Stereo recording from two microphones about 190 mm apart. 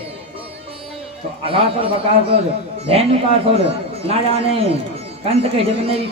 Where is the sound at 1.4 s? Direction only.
30° right (ahead or behind).